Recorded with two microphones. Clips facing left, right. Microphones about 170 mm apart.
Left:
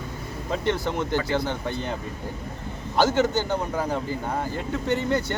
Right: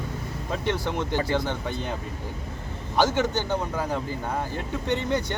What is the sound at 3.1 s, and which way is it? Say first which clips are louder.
Speech: left 2 dB; 10° left (ahead or behind).